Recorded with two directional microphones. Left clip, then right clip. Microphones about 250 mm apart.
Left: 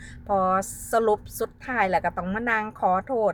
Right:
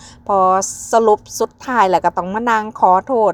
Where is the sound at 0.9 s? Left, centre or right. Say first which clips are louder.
Right 10 dB; centre.